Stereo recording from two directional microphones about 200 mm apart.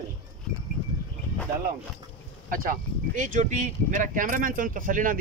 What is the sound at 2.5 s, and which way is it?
Speech, 45° right (ahead or behind).